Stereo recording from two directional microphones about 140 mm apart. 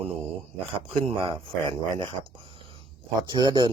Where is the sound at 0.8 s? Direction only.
40° right (ahead or behind).